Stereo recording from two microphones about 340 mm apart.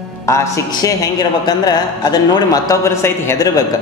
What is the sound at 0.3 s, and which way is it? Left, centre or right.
A man's voice, centre.